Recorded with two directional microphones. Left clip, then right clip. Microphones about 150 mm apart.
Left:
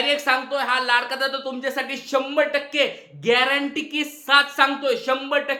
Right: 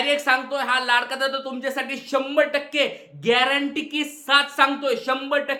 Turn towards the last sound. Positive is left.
turn(degrees=0)  # may be behind; listen again after turning